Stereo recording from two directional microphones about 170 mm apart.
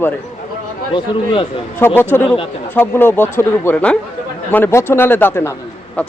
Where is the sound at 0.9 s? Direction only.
30° left (ahead or behind).